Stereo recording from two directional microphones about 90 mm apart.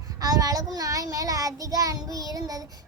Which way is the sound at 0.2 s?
45° right (ahead or behind).